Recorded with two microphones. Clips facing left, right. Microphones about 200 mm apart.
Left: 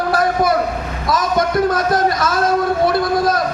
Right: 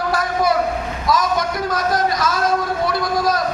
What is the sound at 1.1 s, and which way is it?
Speech, 55° left (ahead or behind).